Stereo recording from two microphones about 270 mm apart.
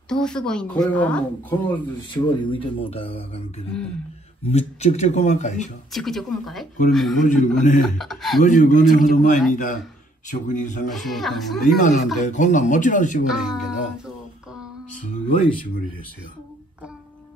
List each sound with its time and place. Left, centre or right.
0.1 s a woman's voice: centre
2.2 s speech: centre
5.9 s a woman's voice: centre
7.2 s speech: left
7.8 s a woman's voice: centre
8.4 s speech: left
10.9 s a woman's voice: centre
11.6 s speech: left
13.3 s a sound: centre